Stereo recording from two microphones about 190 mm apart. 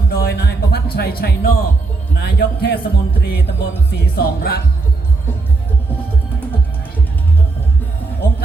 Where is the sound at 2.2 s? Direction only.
60° left (ahead or behind).